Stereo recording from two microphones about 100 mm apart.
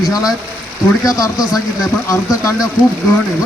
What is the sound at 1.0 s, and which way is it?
Speech, 35° left (ahead or behind).